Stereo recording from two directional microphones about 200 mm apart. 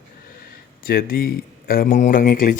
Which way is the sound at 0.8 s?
50° left (ahead or behind).